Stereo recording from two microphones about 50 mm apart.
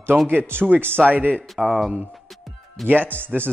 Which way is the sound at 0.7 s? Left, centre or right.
Right.